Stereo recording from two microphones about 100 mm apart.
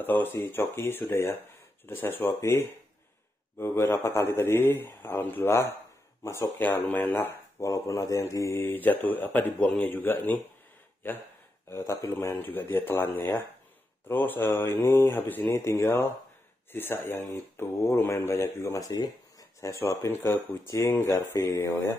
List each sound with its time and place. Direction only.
0.0 s speech: 20° left (ahead or behind)
7.6 s speech: 30° left (ahead or behind)
8.5 s speech: 20° left (ahead or behind)